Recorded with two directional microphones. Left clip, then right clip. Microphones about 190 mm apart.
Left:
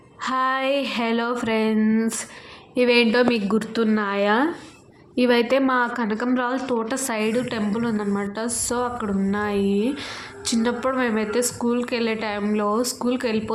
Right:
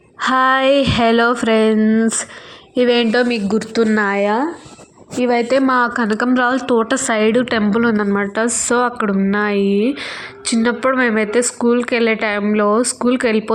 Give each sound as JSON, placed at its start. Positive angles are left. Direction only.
{"t": 0.2, "sound": "a woman's voice", "side_deg": -35}
{"t": 3.8, "sound": "a woman's voice", "side_deg": -35}
{"t": 4.1, "sound": "a woman's voice", "side_deg": -20}
{"t": 5.2, "sound": "a woman's voice", "side_deg": -10}
{"t": 5.5, "sound": "a woman's voice", "side_deg": -35}